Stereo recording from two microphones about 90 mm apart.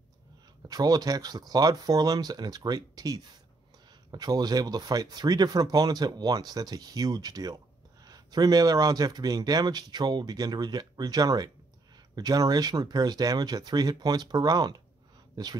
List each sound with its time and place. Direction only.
0.6 s speech: 45° right (ahead or behind)